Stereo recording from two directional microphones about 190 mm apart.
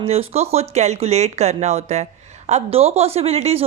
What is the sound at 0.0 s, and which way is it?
Speech, 30° right (ahead or behind).